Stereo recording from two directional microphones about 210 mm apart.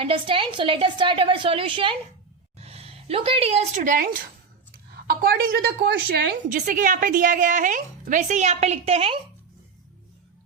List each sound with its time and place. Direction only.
0.0 s a woman's voice: 25° right (ahead or behind); by 6.6 s 50° right (ahead or behind)
6.7 s a woman's voice: 40° right (ahead or behind)